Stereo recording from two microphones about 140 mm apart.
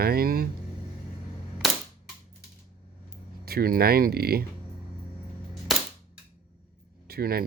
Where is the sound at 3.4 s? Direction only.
90° right.